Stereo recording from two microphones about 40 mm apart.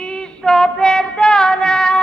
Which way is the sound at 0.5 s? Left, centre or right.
Centre.